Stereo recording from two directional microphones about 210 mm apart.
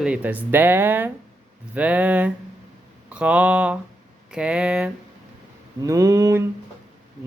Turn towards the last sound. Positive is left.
turn(degrees=-15)  # may be behind; listen again after turning